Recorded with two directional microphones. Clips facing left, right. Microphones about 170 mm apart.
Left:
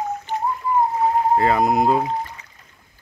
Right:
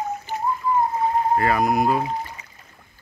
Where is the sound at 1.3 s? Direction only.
25° left (ahead or behind).